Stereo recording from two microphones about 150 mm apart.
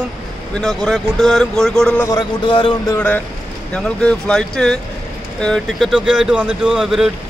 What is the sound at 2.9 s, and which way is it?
A man's voice, 10° left (ahead or behind).